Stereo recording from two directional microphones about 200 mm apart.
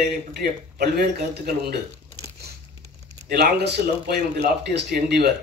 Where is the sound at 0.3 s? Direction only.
50° right (ahead or behind).